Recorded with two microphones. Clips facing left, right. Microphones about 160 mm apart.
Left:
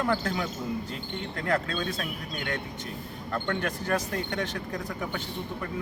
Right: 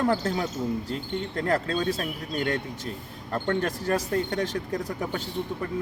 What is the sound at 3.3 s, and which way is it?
Speech, 35° right (ahead or behind).